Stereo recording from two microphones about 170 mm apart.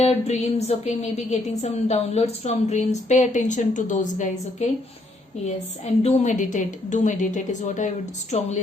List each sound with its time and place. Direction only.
0.0 s a sound: 40° left (ahead or behind)
0.9 s a woman's voice: 40° left (ahead or behind)
5.8 s a woman's voice: 40° left (ahead or behind)